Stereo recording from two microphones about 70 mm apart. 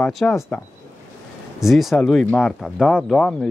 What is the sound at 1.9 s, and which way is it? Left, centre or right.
Speech, centre.